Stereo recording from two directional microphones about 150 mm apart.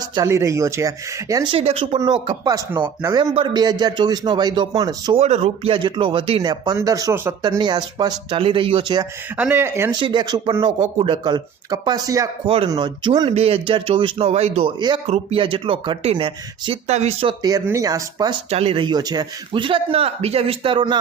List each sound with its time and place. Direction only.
0.3 s a man's voice: 20° right (ahead or behind)
1.5 s a man's voice: 40° right (ahead or behind)
2.5 s a man's voice: 20° right (ahead or behind)
5.1 s a man's voice: 45° right (ahead or behind)
6.5 s a man's voice: 25° right (ahead or behind)
7.6 s a man's voice: 30° right (ahead or behind)
9.4 s speech: 15° right (ahead or behind)
10.0 s a man's voice: 30° right (ahead or behind)
10.8 s a man's voice: 35° right (ahead or behind)
16.8 s speech: 50° right (ahead or behind)
17.4 s a man's voice: 25° right (ahead or behind)
18.5 s a man's voice: 40° right (ahead or behind)